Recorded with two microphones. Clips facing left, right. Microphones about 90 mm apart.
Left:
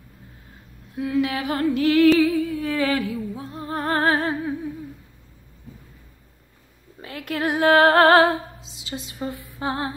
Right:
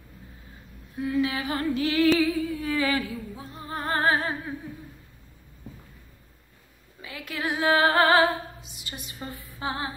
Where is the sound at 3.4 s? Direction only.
60° left (ahead or behind).